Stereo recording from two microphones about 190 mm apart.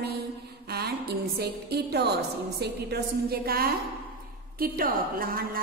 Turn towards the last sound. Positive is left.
turn(degrees=-50)  # may be behind; listen again after turning